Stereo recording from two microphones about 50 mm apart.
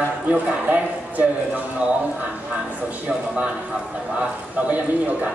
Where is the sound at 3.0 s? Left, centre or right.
Right.